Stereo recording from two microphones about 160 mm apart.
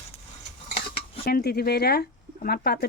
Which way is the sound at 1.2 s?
75° left (ahead or behind).